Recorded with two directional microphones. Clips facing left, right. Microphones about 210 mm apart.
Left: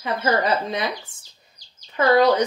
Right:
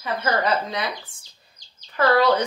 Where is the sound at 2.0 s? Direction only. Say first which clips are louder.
Left 2 dB; 15° left (ahead or behind).